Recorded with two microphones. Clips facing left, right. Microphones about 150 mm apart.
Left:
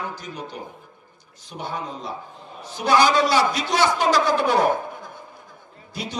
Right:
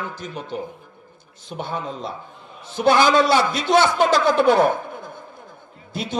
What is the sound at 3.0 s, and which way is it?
Speech, 25° right (ahead or behind).